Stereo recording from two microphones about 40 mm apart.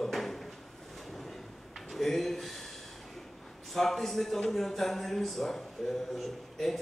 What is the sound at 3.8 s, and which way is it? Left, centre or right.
A man's voice, centre.